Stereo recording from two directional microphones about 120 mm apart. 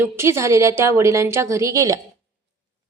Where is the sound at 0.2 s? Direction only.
25° right (ahead or behind).